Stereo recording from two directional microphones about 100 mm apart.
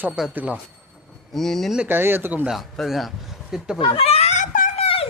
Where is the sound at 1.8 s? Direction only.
20° right (ahead or behind).